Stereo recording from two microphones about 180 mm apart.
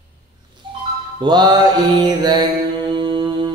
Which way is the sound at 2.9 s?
25° right (ahead or behind).